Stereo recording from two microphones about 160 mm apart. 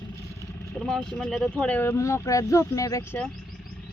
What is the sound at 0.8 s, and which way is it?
Speech, centre (ahead or behind).